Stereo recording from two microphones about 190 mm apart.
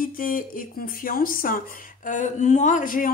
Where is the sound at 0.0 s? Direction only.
45° left (ahead or behind).